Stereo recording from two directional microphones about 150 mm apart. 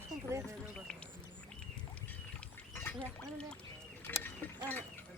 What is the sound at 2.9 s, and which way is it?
Duck, 5° left (ahead or behind).